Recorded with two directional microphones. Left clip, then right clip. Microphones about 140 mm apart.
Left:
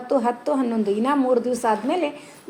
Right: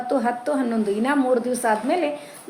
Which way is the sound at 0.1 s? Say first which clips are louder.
Left 2 dB; 15° left (ahead or behind).